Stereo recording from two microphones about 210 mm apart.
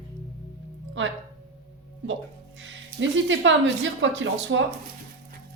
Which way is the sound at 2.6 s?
60° right (ahead or behind).